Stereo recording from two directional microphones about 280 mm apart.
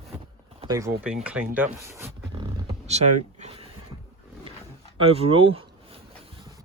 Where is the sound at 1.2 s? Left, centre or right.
Centre.